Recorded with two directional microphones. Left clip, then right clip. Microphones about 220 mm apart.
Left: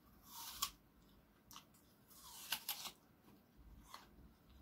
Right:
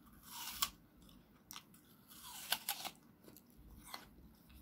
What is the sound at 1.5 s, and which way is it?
Scissors, 35° right (ahead or behind).